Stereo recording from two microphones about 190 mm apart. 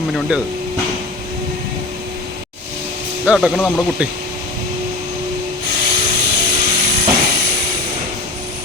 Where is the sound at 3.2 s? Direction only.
Centre (ahead or behind).